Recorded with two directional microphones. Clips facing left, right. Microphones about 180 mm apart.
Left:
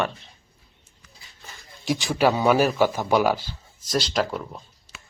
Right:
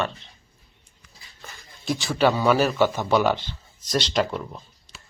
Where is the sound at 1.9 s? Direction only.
15° left (ahead or behind).